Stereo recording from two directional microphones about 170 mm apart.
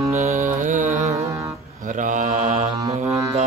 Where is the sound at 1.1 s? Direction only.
20° right (ahead or behind).